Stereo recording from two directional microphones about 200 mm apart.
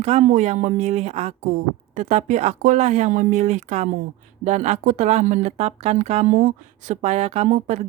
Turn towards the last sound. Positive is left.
turn(degrees=-35)  # may be behind; listen again after turning